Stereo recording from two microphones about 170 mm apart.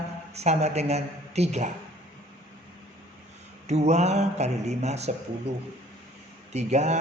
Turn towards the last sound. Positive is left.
turn(degrees=-40)  # may be behind; listen again after turning